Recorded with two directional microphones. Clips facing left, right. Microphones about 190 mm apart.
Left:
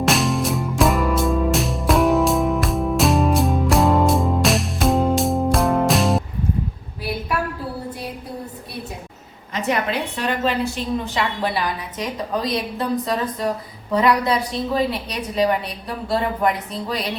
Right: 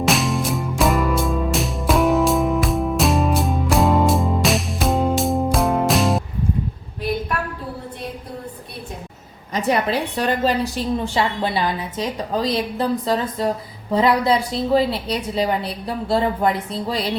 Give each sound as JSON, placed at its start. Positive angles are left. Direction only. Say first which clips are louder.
{"t": 0.0, "sound": "music", "louder": "left 1 dB", "side_deg": 0}
{"t": 9.5, "sound": "a woman's voice", "louder": "right 2 dB", "side_deg": -35}